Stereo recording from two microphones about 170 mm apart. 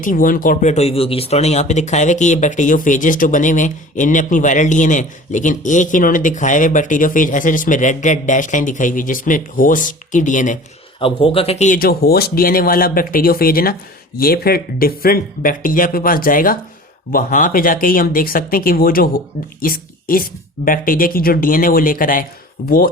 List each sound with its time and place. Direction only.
0.0 s speech: 55° left (ahead or behind)
11.0 s a woman's voice: 30° left (ahead or behind); by 22.3 s 55° left (ahead or behind)